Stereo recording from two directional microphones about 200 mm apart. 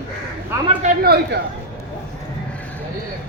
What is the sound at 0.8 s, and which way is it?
Speech, 50° right (ahead or behind).